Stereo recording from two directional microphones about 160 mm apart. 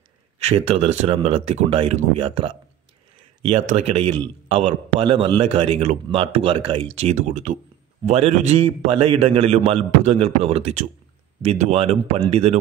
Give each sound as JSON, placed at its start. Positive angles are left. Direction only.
{"t": 0.4, "sound": "a man's voice", "side_deg": -40}
{"t": 4.5, "sound": "a man's voice", "side_deg": -40}